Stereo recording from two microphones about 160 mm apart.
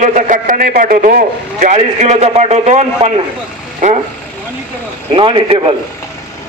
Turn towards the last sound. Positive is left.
turn(degrees=-35)  # may be behind; listen again after turning